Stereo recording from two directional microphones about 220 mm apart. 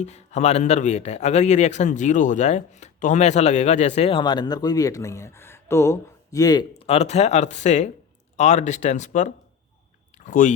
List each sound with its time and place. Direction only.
0.0 s a man's voice: 30° left (ahead or behind)